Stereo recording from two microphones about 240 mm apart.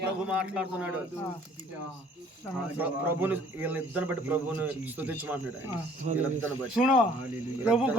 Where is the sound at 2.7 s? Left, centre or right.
Centre.